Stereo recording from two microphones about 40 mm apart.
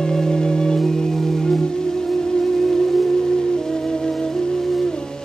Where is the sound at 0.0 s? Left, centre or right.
Centre.